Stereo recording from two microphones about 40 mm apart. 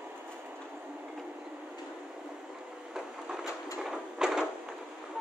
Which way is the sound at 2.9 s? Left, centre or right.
Centre.